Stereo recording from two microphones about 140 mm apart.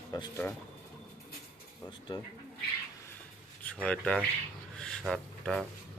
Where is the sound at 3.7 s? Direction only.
10° left (ahead or behind).